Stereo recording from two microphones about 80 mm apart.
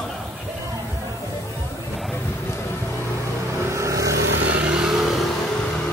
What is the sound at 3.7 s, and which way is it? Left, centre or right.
Vehicle, right.